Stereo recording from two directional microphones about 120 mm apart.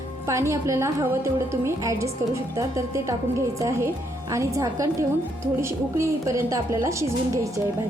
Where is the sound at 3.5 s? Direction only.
25° right (ahead or behind).